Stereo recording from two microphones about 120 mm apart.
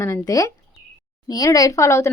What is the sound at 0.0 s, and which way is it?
Speech, 25° left (ahead or behind).